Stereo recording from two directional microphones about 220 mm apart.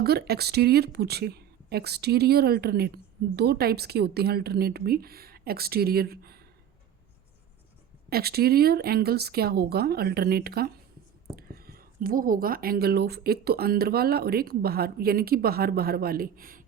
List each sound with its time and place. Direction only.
0.0 s a woman's voice: 45° right (ahead or behind)
8.1 s a woman's voice: 45° right (ahead or behind)